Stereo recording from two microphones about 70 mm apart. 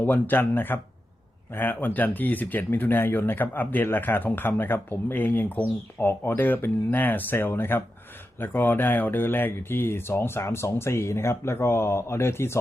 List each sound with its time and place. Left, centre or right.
0.0 s speech: left